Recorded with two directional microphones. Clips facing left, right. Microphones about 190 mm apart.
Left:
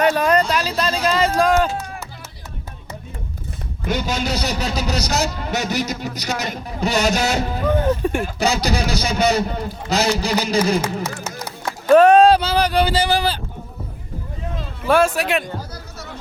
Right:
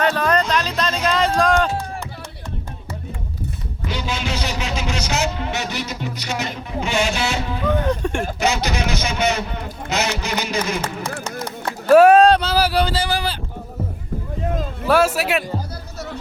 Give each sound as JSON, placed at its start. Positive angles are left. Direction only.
{"t": 0.0, "sound": "a sound", "side_deg": 10}
{"t": 3.8, "sound": "a man's voice", "side_deg": 45}
{"t": 7.9, "sound": "speech", "side_deg": 5}
{"t": 8.4, "sound": "a man's voice", "side_deg": 35}
{"t": 11.6, "sound": "a sound", "side_deg": -5}
{"t": 12.8, "sound": "speech", "side_deg": 15}
{"t": 14.8, "sound": "speech", "side_deg": -5}